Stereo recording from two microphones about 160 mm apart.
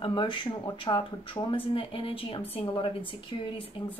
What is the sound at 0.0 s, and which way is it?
Speech, 30° left (ahead or behind).